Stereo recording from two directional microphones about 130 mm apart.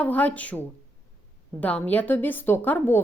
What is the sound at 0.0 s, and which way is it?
A woman's voice, 10° left (ahead or behind).